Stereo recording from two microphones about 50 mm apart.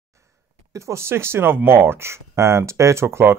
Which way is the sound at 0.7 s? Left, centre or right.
Right.